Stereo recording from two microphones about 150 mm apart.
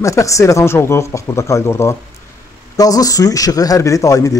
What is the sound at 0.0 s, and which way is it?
Speech, 20° left (ahead or behind).